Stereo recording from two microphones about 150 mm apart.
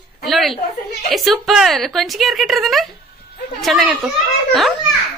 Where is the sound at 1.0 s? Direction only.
Centre (ahead or behind).